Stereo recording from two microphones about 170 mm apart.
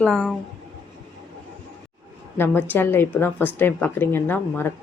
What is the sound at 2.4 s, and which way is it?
A woman's voice, 10° left (ahead or behind).